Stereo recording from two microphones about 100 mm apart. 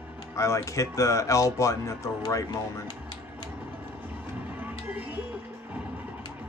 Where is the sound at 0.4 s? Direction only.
30° left (ahead or behind).